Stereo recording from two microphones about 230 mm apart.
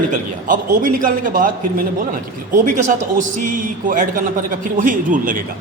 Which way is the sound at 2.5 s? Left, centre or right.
Right.